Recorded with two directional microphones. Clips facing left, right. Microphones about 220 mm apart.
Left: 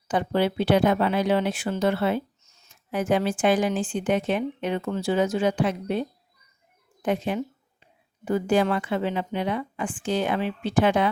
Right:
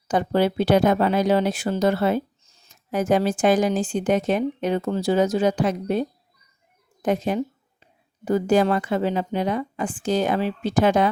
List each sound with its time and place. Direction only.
0.1 s speech: 40° right (ahead or behind)